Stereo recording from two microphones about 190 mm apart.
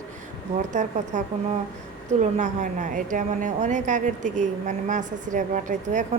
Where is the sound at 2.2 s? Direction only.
40° right (ahead or behind).